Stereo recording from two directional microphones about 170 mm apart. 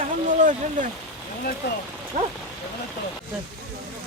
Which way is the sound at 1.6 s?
75° left (ahead or behind).